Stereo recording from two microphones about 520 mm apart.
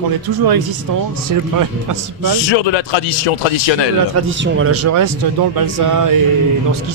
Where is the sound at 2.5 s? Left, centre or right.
Left.